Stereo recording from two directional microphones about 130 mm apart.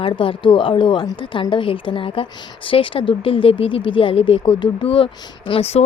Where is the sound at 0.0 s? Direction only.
40° left (ahead or behind).